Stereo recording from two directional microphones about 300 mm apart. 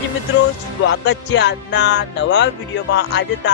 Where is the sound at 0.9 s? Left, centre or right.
Left.